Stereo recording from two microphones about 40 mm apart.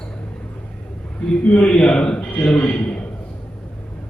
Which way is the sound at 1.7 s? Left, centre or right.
Left.